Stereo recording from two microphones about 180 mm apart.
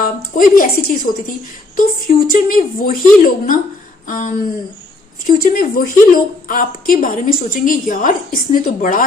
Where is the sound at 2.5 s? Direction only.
50° left (ahead or behind).